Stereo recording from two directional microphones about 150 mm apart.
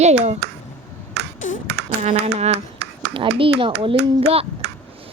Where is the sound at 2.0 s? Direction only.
45° right (ahead or behind).